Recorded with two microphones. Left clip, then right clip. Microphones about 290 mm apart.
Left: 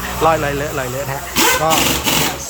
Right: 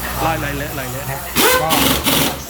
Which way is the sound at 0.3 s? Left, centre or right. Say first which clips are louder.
Left 8 dB; centre.